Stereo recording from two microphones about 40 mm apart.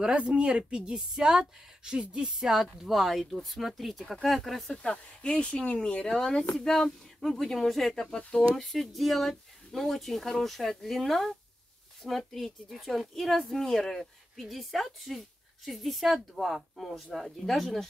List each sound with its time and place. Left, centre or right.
0.0 s a woman's voice: right; by 4.7 s centre
4.8 s speech: left
6.0 s a woman's voice: centre
16.5 s a woman's voice: centre